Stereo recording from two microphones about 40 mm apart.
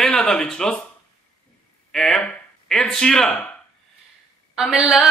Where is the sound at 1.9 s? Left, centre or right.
Centre.